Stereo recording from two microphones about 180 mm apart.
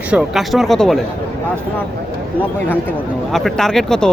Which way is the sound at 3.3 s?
Centre (ahead or behind).